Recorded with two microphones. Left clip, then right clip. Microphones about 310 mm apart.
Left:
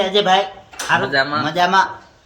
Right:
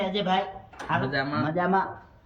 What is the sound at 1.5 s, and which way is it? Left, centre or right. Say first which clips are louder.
Speech: left 11 dB; centre.